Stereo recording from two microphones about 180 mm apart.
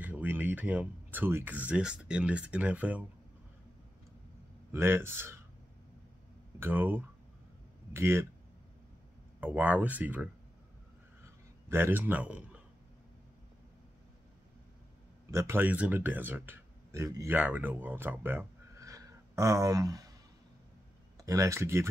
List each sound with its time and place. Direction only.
0.0 s speech: 10° right (ahead or behind)
4.7 s speech: 15° right (ahead or behind)
6.6 s speech: 10° right (ahead or behind)
9.4 s speech: 10° right (ahead or behind)
11.7 s speech: 10° right (ahead or behind)
15.3 s speech: 15° right (ahead or behind)
21.2 s speech: 15° right (ahead or behind)